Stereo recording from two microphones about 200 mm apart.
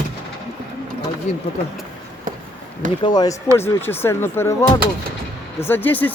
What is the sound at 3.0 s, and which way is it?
Speech, 20° left (ahead or behind).